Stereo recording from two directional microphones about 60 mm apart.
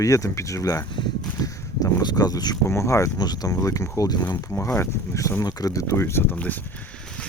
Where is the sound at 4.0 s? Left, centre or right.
Left.